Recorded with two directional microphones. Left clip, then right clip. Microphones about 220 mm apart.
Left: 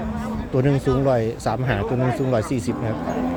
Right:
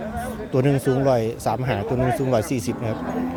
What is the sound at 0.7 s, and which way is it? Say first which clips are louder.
Speech: even; 25° left (ahead or behind).